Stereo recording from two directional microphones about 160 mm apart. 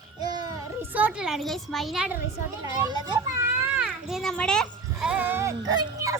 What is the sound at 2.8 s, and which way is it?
Speech, 25° right (ahead or behind).